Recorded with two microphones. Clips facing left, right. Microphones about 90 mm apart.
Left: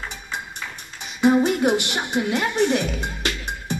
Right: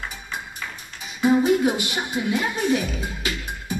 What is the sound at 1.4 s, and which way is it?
Music, 75° left (ahead or behind).